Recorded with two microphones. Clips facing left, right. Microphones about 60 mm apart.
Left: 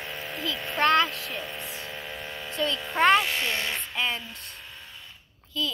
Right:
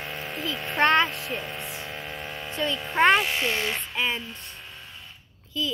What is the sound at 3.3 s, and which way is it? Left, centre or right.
Speech, centre.